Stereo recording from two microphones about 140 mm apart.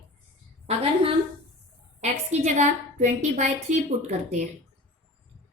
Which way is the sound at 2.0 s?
55° right (ahead or behind).